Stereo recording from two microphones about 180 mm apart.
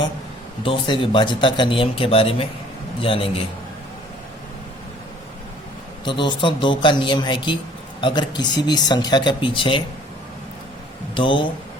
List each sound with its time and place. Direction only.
0.6 s a man's voice: 30° left (ahead or behind)
6.1 s speech: 25° left (ahead or behind)
11.1 s speech: 30° left (ahead or behind)